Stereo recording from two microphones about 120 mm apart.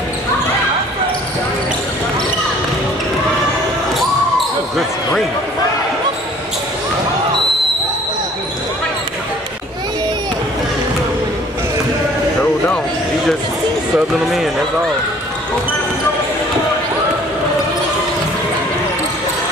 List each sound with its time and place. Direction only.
13.9 s music: centre (ahead or behind)